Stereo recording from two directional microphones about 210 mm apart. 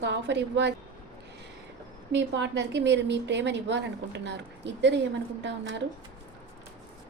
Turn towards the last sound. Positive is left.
turn(degrees=-55)  # may be behind; listen again after turning